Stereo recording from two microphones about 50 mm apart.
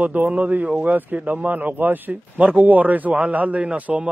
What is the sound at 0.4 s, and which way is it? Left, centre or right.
A man's voice, right.